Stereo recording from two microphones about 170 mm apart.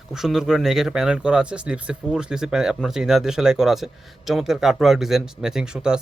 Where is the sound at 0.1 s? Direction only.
Centre (ahead or behind).